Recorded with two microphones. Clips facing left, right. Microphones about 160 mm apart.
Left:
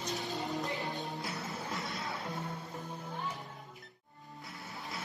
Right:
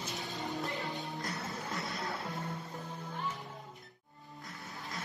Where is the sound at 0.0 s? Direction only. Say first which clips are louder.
Left 3 dB; centre (ahead or behind).